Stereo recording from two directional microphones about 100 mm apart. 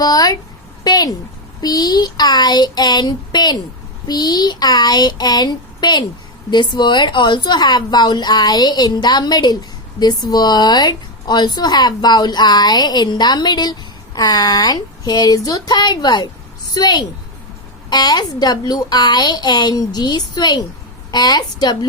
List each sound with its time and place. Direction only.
0.0 s a woman's voice: 40° left (ahead or behind)